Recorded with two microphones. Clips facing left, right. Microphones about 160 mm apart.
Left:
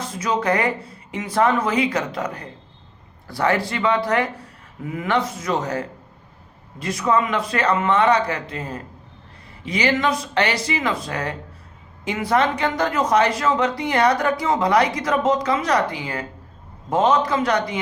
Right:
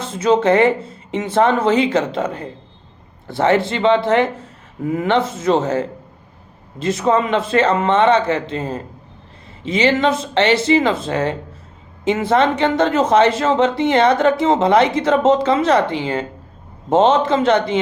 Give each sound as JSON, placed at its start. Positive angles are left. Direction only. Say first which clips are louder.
{"t": 0.0, "sound": "a woman's voice", "louder": "right 7 dB", "side_deg": -25}